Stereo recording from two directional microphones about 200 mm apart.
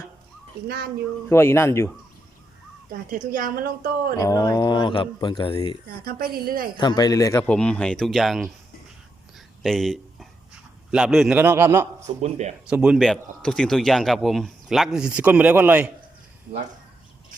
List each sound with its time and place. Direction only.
1.3 s speech: 10° left (ahead or behind)
2.9 s a woman's voice: 45° right (ahead or behind)
4.2 s speech: 20° left (ahead or behind)
6.1 s a woman's voice: 50° right (ahead or behind)
6.7 s speech: 20° left (ahead or behind)
7.4 s a man's voice: 5° left (ahead or behind)
9.6 s a man's voice: centre (ahead or behind)
12.0 s speech: 35° right (ahead or behind)
12.6 s a man's voice: 5° right (ahead or behind)